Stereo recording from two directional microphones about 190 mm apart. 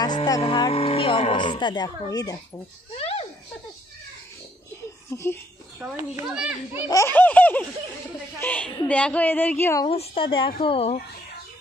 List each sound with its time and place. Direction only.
0.0 s vehicle: 20° left (ahead or behind)
0.4 s speech: 30° left (ahead or behind)
3.0 s a sound: 30° left (ahead or behind)
5.1 s a woman's voice: 15° left (ahead or behind)
5.8 s a child's voice: 10° right (ahead or behind)
6.9 s a woman's voice: 15° left (ahead or behind)
9.8 s speech: 30° left (ahead or behind)